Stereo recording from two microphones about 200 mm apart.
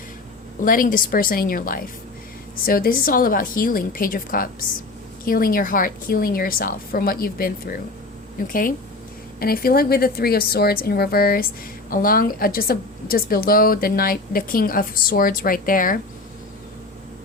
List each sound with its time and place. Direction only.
0.6 s a woman's voice: 45° left (ahead or behind)